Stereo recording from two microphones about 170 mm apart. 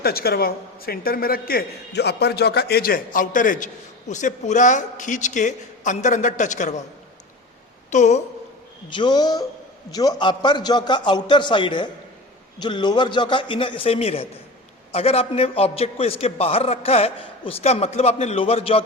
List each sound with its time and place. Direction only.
0.0 s a man's voice: 65° left (ahead or behind); by 6.7 s 45° left (ahead or behind)
7.9 s a woman's voice: 45° left (ahead or behind)
8.9 s a man's voice: 25° left (ahead or behind)